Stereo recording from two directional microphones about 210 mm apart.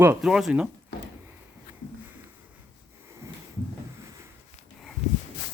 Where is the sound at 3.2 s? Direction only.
10° right (ahead or behind).